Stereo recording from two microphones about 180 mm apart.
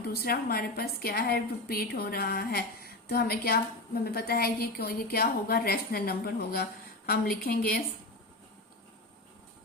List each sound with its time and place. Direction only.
0.1 s a woman's voice: 55° left (ahead or behind)